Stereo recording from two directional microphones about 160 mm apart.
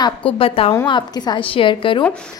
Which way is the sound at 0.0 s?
30° left (ahead or behind).